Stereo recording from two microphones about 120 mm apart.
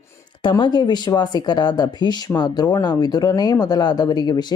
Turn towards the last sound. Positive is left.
turn(degrees=35)  # may be behind; listen again after turning